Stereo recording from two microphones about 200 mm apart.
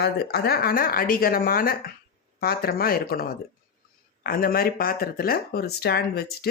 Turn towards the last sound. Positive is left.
turn(degrees=50)  # may be behind; listen again after turning